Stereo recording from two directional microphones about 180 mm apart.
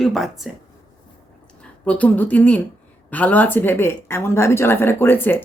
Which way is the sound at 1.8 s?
10° left (ahead or behind).